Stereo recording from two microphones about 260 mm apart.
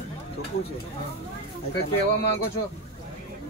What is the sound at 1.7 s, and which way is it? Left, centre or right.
Speech, left.